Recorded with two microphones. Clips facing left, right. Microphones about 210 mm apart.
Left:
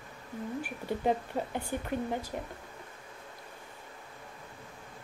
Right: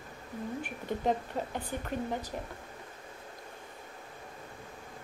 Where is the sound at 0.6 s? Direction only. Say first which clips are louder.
Left 1 dB; 10° left (ahead or behind).